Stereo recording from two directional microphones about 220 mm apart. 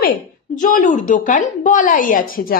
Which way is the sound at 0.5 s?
35° left (ahead or behind).